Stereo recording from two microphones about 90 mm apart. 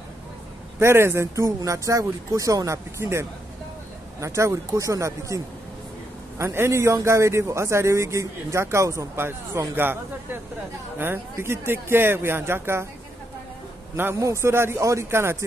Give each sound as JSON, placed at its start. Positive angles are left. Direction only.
{"t": 0.7, "sound": "a man's voice", "side_deg": -30}
{"t": 11.0, "sound": "speech", "side_deg": -25}
{"t": 14.2, "sound": "speech", "side_deg": -30}